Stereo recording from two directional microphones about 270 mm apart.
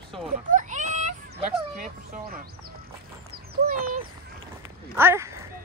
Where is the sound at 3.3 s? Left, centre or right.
Right.